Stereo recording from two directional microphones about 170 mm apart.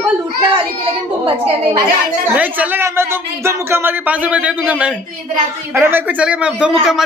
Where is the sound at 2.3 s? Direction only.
10° right (ahead or behind).